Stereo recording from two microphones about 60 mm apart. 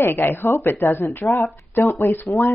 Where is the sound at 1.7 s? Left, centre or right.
Left.